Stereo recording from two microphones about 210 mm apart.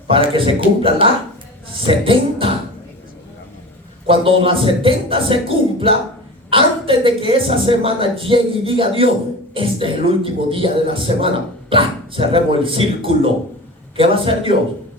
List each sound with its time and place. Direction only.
0.1 s a woman's voice: 25° right (ahead or behind)
4.0 s a woman's voice: 25° right (ahead or behind)